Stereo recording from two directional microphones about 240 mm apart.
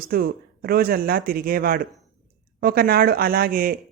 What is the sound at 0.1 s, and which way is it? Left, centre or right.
Speech, right.